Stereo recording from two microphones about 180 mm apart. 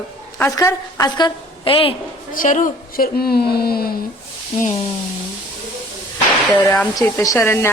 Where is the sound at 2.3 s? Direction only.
45° left (ahead or behind).